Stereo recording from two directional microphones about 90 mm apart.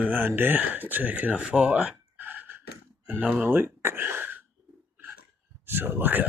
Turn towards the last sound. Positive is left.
turn(degrees=-20)  # may be behind; listen again after turning